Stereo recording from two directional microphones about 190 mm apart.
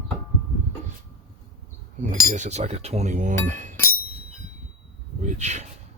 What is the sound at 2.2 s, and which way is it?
Speech, 40° right (ahead or behind).